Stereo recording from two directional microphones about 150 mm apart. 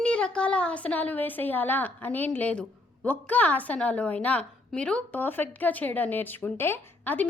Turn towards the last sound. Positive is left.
turn(degrees=15)  # may be behind; listen again after turning